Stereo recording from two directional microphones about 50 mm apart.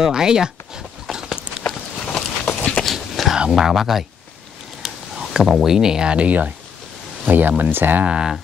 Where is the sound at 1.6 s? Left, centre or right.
Left.